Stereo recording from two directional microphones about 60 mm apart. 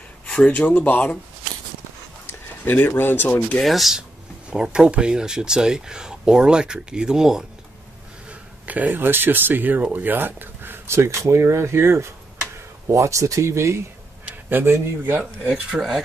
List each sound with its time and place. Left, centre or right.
0.5 s speech: left
2.6 s speech: left
3.6 s speech: centre
4.5 s speech: centre
8.3 s speech: right
12.8 s speech: right
14.5 s speech: right
15.7 s speech: centre